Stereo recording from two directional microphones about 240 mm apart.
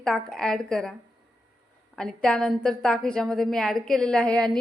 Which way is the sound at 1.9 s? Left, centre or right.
Centre.